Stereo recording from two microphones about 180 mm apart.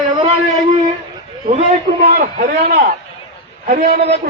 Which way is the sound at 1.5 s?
40° right (ahead or behind).